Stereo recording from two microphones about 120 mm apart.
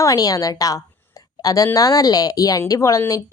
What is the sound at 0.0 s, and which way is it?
A woman's voice, 30° left (ahead or behind).